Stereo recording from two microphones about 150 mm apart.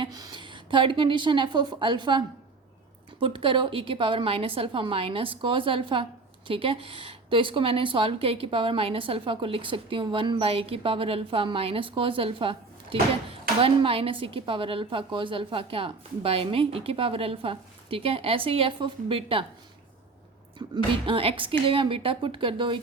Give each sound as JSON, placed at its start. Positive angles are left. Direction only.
{"t": 0.0, "sound": "a woman's voice", "side_deg": -25}
{"t": 20.6, "sound": "a woman's voice", "side_deg": -35}